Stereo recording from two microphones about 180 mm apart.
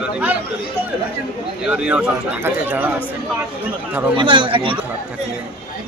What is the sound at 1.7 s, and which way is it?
Speech, 5° right (ahead or behind).